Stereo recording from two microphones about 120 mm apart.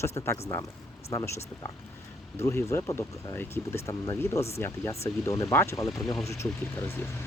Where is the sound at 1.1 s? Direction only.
25° left (ahead or behind).